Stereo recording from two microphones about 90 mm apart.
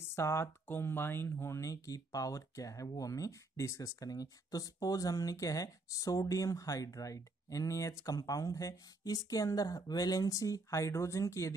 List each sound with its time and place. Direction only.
0.1 s speech: 30° left (ahead or behind)